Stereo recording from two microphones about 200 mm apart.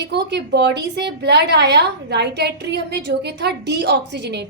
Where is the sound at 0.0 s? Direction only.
60° right (ahead or behind).